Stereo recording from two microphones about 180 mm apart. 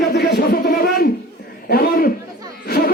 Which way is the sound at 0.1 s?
60° left (ahead or behind).